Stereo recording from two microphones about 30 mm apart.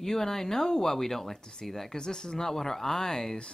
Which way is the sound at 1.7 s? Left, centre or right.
Centre.